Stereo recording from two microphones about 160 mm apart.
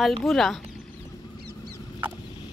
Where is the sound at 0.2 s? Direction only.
Centre (ahead or behind).